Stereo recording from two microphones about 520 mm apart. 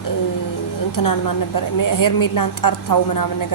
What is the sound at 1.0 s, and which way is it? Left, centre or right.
A woman's voice, left.